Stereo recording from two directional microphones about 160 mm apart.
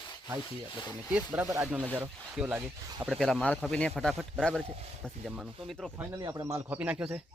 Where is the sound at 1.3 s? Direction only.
15° right (ahead or behind).